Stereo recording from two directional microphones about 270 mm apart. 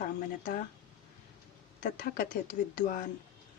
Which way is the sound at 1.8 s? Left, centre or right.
Left.